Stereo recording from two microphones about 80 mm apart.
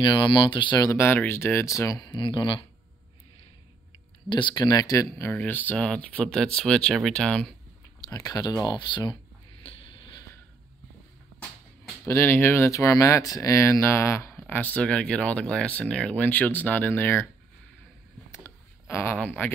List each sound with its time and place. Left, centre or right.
0.0 s speech: left
1.1 s speech: left
2.0 s speech: left
4.3 s speech: left
5.3 s speech: left
8.0 s speech: left
8.6 s speech: left
12.1 s speech: left
13.6 s speech: left
14.5 s speech: left
18.3 s a sound: left
19.1 s speech: left